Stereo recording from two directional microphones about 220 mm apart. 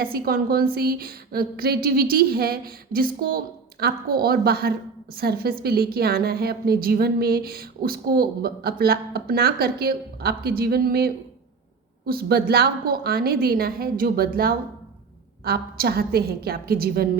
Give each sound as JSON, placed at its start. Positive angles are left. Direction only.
{"t": 0.0, "sound": "a woman's voice", "side_deg": -45}
{"t": 15.4, "sound": "a woman's voice", "side_deg": -45}